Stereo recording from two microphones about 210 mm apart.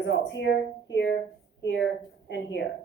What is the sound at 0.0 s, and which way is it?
A woman's voice, 60° left (ahead or behind).